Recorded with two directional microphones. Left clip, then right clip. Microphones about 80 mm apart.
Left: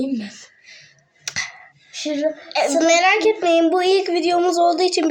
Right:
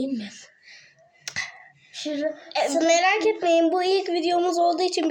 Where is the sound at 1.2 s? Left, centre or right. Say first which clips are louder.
Left 5 dB; centre.